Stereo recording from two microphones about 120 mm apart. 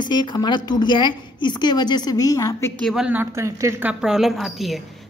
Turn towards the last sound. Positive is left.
turn(degrees=0)  # may be behind; listen again after turning